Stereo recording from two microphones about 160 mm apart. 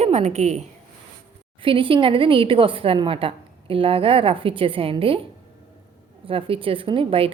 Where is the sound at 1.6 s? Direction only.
35° right (ahead or behind).